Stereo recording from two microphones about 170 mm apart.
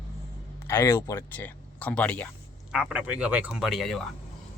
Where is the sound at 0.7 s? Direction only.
15° left (ahead or behind).